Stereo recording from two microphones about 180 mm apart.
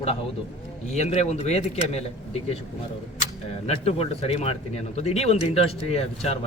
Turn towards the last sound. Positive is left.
turn(degrees=35)  # may be behind; listen again after turning